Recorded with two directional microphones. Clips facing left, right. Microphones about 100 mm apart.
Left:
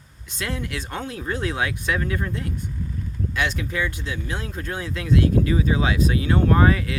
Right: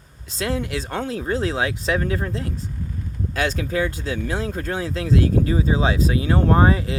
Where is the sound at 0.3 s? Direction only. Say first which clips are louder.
Right 5 dB; 25° right (ahead or behind).